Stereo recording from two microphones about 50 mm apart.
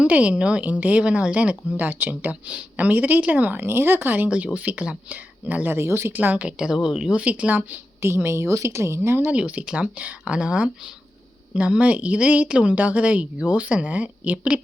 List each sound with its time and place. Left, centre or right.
0.0 s a woman's voice: right
3.6 s speech: right
4.5 s a woman's voice: right
5.7 s speech: right
6.3 s speech: right
8.0 s speech: right
9.3 s speech: right
11.8 s a woman's voice: right